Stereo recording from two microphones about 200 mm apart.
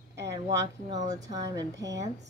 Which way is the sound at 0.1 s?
15° right (ahead or behind).